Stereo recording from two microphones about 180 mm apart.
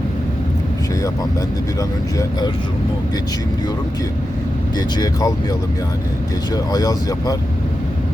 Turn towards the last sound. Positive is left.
turn(degrees=20)  # may be behind; listen again after turning